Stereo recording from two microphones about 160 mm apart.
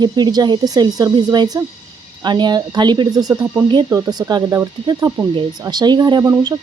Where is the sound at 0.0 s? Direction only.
25° right (ahead or behind).